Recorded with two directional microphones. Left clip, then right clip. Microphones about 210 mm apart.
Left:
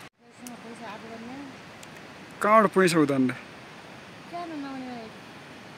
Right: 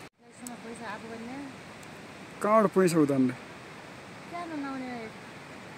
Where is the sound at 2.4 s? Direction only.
5° left (ahead or behind).